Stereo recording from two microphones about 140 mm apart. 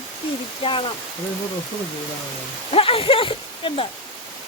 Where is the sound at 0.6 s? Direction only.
40° left (ahead or behind).